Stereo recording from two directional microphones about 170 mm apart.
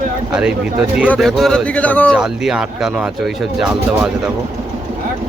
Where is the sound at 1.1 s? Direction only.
Centre (ahead or behind).